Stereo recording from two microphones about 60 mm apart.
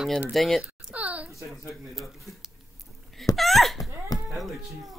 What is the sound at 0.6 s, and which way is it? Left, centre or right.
Speech, centre.